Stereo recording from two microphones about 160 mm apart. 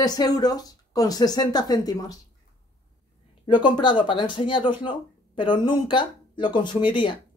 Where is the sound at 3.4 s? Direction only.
30° left (ahead or behind).